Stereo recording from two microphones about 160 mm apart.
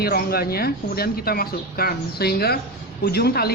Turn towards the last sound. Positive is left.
turn(degrees=80)